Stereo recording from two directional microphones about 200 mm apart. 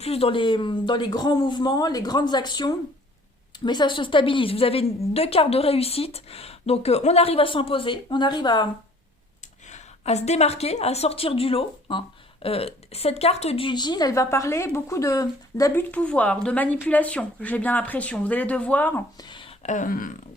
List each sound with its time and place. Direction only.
0.0 s a woman's voice: 30° left (ahead or behind)
9.6 s a woman's voice: 35° left (ahead or behind); by 15.8 s 15° left (ahead or behind)
15.9 s a woman's voice: 5° left (ahead or behind)
19.3 s a sound: 25° left (ahead or behind); by 20.1 s 40° left (ahead or behind)